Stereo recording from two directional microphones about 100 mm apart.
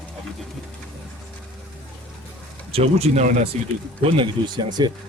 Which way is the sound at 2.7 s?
85° right.